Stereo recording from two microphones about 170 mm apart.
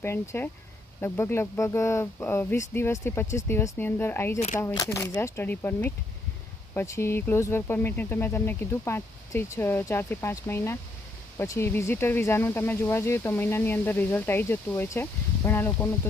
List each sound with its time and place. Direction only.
0.0 s speech: 15° left (ahead or behind)